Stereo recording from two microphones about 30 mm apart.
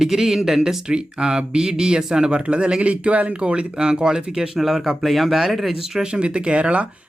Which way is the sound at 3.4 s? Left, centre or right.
Right.